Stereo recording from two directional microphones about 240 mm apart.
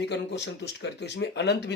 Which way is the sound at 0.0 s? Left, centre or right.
Left.